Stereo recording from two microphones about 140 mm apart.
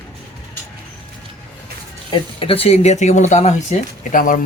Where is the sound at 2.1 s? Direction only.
40° left (ahead or behind).